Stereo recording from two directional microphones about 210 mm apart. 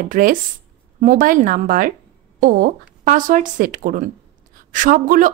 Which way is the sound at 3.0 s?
40° right (ahead or behind).